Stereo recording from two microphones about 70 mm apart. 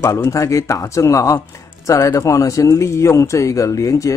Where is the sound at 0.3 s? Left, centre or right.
Left.